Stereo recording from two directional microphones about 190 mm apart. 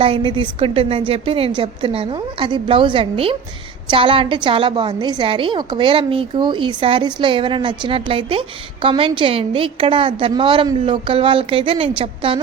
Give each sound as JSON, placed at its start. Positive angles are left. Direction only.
{"t": 0.0, "sound": "a woman's voice", "side_deg": -25}